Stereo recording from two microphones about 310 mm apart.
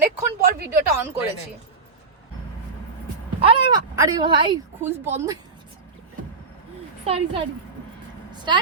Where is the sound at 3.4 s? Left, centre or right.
Centre.